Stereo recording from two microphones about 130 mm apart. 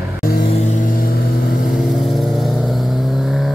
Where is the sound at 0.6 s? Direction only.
75° left (ahead or behind).